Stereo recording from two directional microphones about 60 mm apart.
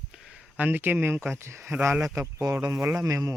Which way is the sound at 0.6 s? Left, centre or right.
Right.